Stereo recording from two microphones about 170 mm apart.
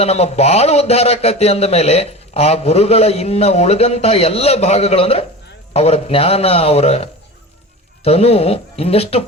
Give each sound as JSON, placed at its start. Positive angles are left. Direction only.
{"t": 0.0, "sound": "a man's voice", "side_deg": 35}